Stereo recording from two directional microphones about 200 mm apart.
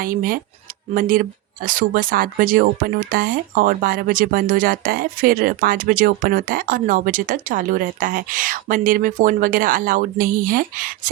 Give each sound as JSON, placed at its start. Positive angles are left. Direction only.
{"t": 0.0, "sound": "speech", "side_deg": -45}